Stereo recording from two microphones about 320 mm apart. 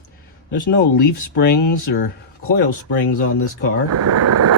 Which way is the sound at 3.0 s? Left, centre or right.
Left.